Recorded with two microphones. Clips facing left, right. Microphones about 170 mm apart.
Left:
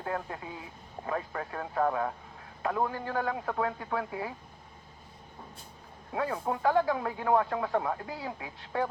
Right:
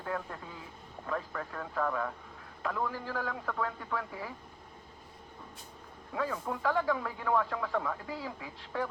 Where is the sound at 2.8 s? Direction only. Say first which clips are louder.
Left 4 dB; 60° left (ahead or behind).